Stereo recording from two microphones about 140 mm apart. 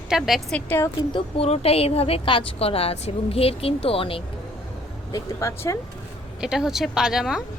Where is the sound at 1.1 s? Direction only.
45° left (ahead or behind).